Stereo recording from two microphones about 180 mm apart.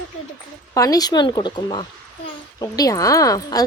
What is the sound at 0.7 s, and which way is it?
A woman's voice, 20° left (ahead or behind).